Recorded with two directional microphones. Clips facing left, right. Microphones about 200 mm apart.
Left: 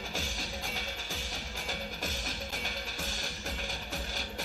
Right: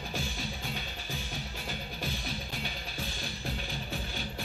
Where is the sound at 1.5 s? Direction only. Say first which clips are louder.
Even; 45° left (ahead or behind).